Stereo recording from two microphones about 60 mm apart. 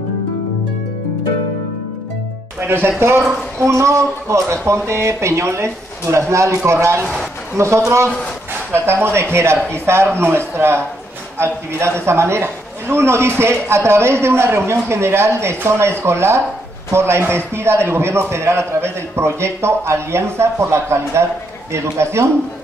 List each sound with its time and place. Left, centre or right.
2.6 s a man's voice: right